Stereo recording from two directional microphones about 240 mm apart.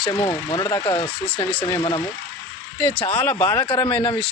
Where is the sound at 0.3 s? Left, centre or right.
Centre.